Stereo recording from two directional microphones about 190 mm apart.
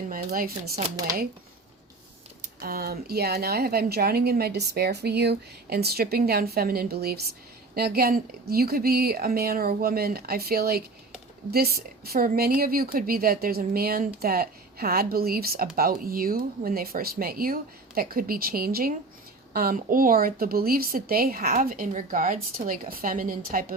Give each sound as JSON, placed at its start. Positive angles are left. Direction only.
{"t": 0.1, "sound": "a woman's voice", "side_deg": -50}
{"t": 0.8, "sound": "speech", "side_deg": -20}
{"t": 2.4, "sound": "a woman's voice", "side_deg": -55}